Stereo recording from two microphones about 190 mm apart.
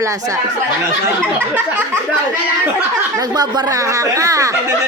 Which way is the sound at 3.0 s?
20° right (ahead or behind).